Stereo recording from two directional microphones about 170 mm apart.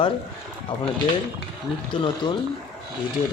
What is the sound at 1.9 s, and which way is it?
Speech, 30° left (ahead or behind).